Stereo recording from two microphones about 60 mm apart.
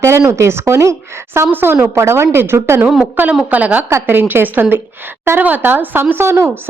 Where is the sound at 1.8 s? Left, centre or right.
Right.